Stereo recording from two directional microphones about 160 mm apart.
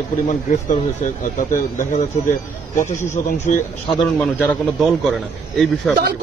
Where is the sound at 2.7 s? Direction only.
15° left (ahead or behind).